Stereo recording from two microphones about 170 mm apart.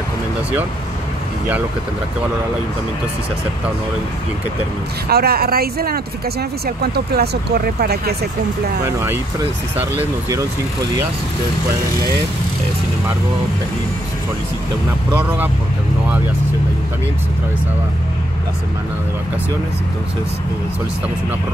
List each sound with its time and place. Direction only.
5.0 s speech: 65° right (ahead or behind)
8.8 s speech: 15° right (ahead or behind)
15.1 s speech: 10° right (ahead or behind)